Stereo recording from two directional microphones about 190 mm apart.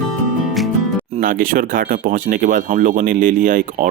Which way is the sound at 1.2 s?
45° right (ahead or behind).